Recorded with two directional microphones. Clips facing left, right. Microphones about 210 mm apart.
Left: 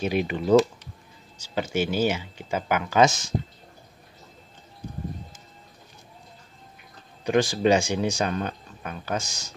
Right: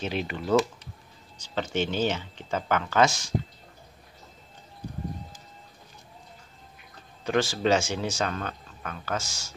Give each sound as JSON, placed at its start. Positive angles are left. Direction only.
{"t": 0.0, "sound": "speech", "side_deg": 15}
{"t": 7.2, "sound": "speech", "side_deg": 15}